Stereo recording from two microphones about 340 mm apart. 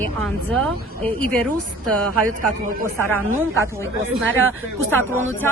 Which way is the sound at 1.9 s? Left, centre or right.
Right.